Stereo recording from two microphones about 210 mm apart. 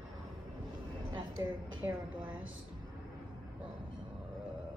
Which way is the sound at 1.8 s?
5° right (ahead or behind).